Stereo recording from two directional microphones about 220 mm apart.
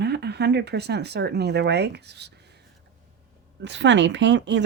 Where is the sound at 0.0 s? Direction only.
50° right (ahead or behind).